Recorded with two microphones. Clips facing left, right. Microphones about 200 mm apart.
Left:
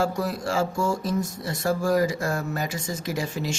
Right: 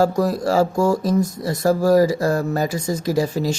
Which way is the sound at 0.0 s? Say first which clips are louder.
Right 8 dB; 40° right (ahead or behind).